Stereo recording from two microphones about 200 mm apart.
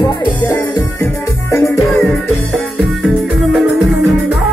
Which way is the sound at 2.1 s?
Centre (ahead or behind).